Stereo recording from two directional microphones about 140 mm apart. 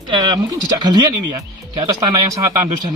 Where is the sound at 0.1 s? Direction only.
30° right (ahead or behind).